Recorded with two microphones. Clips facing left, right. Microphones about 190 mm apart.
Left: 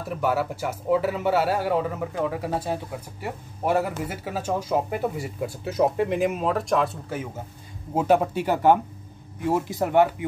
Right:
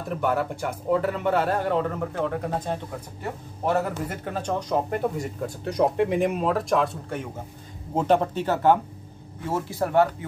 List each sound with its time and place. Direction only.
0.1 s speech: 5° left (ahead or behind)